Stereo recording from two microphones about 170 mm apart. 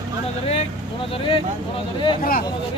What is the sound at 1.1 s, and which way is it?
Speech, 30° left (ahead or behind).